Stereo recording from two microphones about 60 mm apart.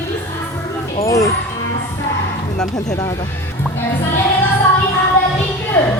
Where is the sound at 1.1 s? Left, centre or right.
Left.